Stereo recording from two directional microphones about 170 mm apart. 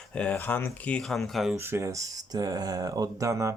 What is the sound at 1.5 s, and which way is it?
Speech, 15° right (ahead or behind).